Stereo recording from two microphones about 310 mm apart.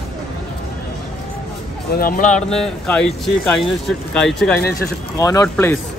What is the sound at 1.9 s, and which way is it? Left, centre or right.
Speech, left.